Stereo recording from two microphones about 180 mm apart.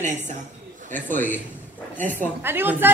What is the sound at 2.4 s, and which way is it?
Speech, 10° right (ahead or behind).